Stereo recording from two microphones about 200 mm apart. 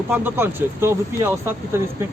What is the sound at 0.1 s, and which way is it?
Speech, 10° right (ahead or behind).